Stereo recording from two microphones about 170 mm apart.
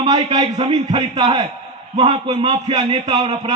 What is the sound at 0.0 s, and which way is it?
A man's voice, 25° right (ahead or behind).